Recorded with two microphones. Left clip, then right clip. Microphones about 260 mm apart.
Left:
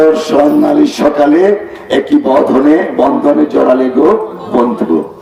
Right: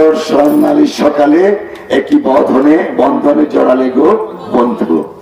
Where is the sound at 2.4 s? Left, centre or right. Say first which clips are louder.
Even; right.